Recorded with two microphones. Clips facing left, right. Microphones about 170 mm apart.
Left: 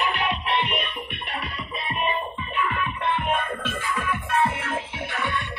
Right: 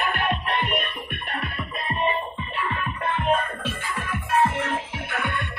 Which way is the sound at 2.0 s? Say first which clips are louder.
Right 2 dB; 35° right (ahead or behind).